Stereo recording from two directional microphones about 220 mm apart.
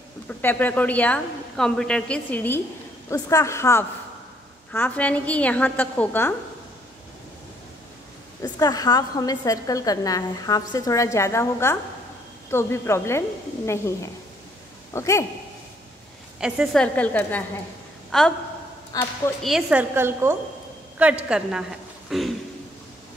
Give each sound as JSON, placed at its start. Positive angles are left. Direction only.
{"t": 0.3, "sound": "a woman's voice", "side_deg": 10}
{"t": 8.4, "sound": "a woman's voice", "side_deg": 15}
{"t": 14.9, "sound": "speech", "side_deg": 15}
{"t": 16.3, "sound": "a woman's voice", "side_deg": -5}
{"t": 18.9, "sound": "a woman's voice", "side_deg": 15}
{"t": 19.4, "sound": "a woman's voice", "side_deg": -5}